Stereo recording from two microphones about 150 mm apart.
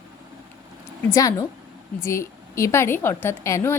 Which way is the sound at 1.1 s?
20° left (ahead or behind).